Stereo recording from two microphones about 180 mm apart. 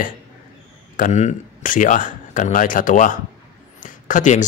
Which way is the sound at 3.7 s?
45° left (ahead or behind).